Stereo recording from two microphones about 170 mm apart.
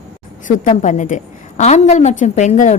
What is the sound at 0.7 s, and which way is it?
A woman's voice, 45° left (ahead or behind).